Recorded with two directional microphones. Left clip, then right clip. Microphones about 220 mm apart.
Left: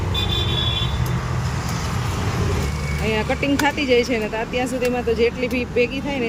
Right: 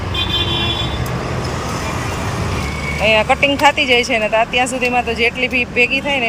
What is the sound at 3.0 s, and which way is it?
Speech, 5° left (ahead or behind).